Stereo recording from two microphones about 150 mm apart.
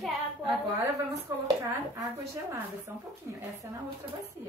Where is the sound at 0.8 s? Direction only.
20° right (ahead or behind).